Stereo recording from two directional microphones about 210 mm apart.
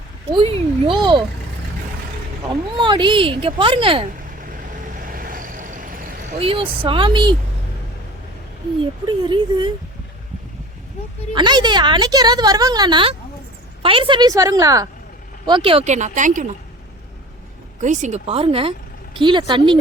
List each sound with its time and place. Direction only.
0.3 s speech: 25° right (ahead or behind)
2.7 s speech: 20° right (ahead or behind)
4.9 s vehicle: 40° right (ahead or behind)
6.4 s speech: 25° right (ahead or behind)
9.0 s speech: 20° right (ahead or behind)
11.3 s a woman's voice: 20° right (ahead or behind); by 16.5 s 35° right (ahead or behind)
17.8 s speech: 35° right (ahead or behind)